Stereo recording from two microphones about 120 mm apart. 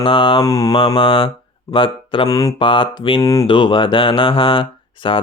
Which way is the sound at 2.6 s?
45° left (ahead or behind).